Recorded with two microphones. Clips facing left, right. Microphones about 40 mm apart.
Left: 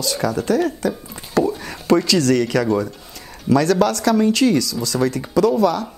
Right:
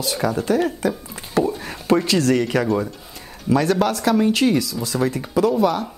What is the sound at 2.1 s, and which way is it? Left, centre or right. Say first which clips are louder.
Speech: left 1 dB; centre.